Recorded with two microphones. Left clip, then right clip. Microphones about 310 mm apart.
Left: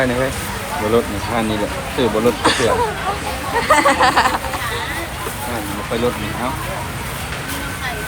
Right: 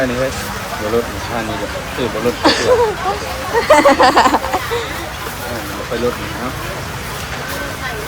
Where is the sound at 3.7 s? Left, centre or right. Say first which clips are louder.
Right 4 dB; centre.